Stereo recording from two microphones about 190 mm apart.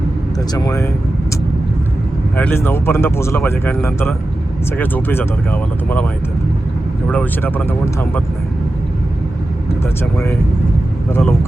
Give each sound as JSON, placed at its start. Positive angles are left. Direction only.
{"t": 0.5, "sound": "speech", "side_deg": 20}
{"t": 2.3, "sound": "speech", "side_deg": 10}
{"t": 7.1, "sound": "speech", "side_deg": 10}
{"t": 10.0, "sound": "speech", "side_deg": 15}